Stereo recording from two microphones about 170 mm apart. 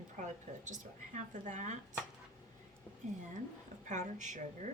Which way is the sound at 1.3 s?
45° right (ahead or behind).